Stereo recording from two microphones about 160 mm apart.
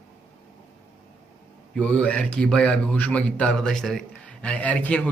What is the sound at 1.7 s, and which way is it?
A man's voice, 10° left (ahead or behind).